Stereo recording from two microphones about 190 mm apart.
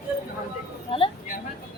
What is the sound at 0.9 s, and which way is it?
Speech, 30° left (ahead or behind).